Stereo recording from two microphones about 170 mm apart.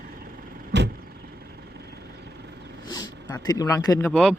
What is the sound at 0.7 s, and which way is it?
Vehicle, 90° right.